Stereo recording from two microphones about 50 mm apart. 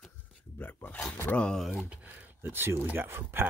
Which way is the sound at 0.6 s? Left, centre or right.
Left.